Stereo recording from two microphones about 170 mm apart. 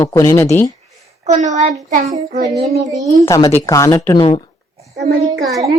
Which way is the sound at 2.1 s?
20° right (ahead or behind).